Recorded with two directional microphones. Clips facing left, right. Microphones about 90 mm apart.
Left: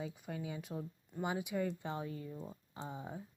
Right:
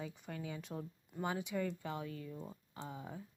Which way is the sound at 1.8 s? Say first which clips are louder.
Left 2 dB; 30° left (ahead or behind).